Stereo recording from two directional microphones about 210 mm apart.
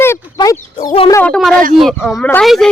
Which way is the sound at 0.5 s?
30° left (ahead or behind).